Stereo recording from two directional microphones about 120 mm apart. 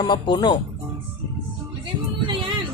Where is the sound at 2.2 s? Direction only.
40° right (ahead or behind).